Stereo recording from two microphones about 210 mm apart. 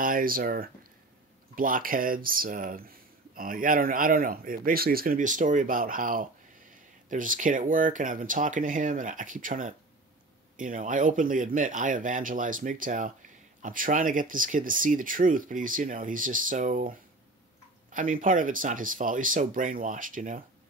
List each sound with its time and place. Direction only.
0.0 s speech: 40° right (ahead or behind)
17.9 s speech: 40° right (ahead or behind)